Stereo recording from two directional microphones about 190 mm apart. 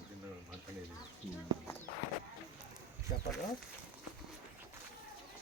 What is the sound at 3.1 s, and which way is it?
Speech, 50° left (ahead or behind).